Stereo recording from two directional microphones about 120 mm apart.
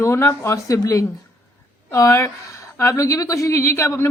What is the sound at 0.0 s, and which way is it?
Speech, 25° left (ahead or behind).